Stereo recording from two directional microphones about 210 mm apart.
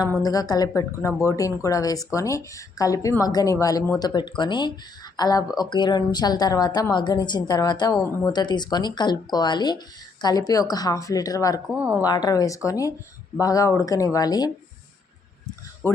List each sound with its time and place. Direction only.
0.2 s speech: 15° left (ahead or behind)
11.7 s a woman's voice: 5° right (ahead or behind)
12.0 s speech: 20° left (ahead or behind)